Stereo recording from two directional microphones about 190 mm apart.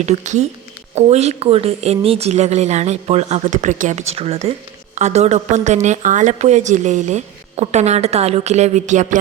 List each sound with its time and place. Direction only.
0.0 s a woman's voice: 40° right (ahead or behind)